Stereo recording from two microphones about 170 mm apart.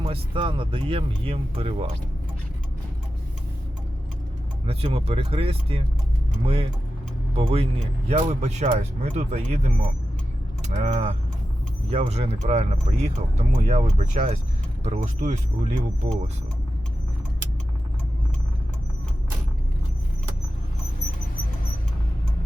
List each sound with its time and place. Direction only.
0.0 s speech: 30° right (ahead or behind)
4.6 s speech: 35° right (ahead or behind)
10.6 s speech: 45° right (ahead or behind)